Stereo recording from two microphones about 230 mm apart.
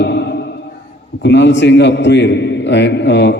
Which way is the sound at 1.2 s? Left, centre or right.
Left.